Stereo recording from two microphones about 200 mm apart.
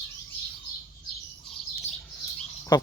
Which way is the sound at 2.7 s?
20° left (ahead or behind).